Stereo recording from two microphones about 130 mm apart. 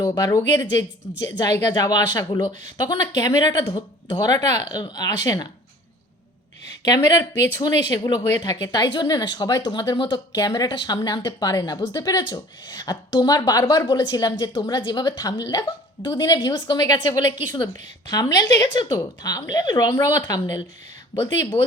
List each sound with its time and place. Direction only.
0.0 s a woman's voice: 30° left (ahead or behind)
6.8 s a woman's voice: 30° left (ahead or behind)
21.5 s speech: 50° left (ahead or behind)